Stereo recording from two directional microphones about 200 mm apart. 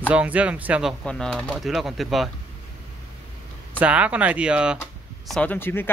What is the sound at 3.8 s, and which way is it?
Speech, 5° right (ahead or behind).